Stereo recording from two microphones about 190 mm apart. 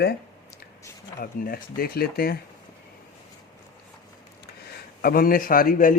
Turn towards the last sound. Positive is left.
turn(degrees=45)  # may be behind; listen again after turning